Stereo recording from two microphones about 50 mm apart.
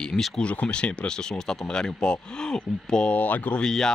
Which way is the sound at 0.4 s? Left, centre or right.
Left.